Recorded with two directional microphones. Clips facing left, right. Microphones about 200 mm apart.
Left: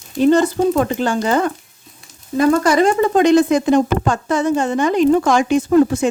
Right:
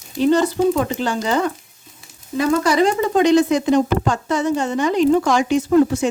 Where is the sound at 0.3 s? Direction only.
50° left (ahead or behind).